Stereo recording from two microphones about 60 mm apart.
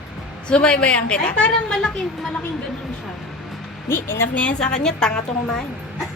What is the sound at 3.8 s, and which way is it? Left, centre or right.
Speech, left.